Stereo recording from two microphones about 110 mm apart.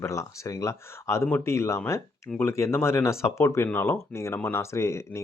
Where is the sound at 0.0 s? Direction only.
30° left (ahead or behind).